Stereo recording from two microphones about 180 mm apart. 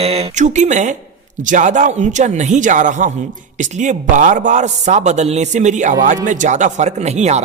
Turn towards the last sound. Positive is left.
turn(degrees=-40)  # may be behind; listen again after turning